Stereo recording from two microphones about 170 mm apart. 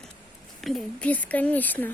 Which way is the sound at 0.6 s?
5° left (ahead or behind).